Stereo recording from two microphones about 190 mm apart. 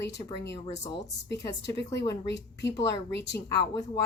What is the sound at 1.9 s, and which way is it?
Speech, 15° left (ahead or behind).